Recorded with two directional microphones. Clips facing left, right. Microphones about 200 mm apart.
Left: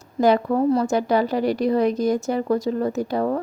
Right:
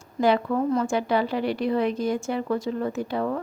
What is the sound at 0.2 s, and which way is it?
A woman's voice, 40° left (ahead or behind).